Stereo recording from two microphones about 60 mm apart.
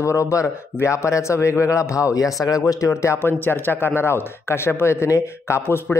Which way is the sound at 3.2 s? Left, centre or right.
Left.